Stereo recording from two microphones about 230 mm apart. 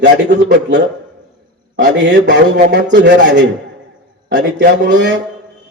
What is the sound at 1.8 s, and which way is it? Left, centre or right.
Speech, right.